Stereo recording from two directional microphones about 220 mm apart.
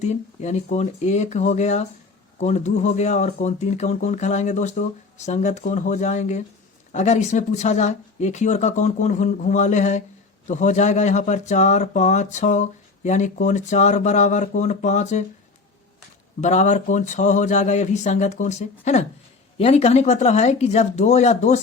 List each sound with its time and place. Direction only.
0.0 s speech: 30° left (ahead or behind)
16.4 s speech: 30° left (ahead or behind)